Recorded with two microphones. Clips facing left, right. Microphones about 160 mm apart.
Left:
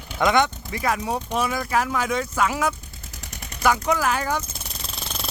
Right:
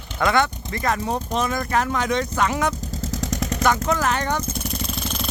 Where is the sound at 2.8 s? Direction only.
90° right.